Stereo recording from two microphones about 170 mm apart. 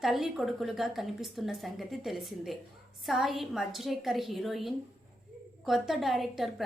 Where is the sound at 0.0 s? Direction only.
Centre (ahead or behind).